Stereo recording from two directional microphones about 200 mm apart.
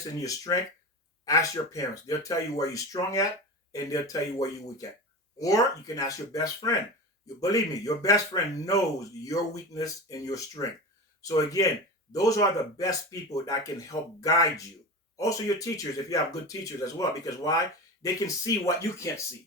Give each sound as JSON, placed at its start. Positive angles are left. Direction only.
{"t": 0.2, "sound": "speech", "side_deg": 15}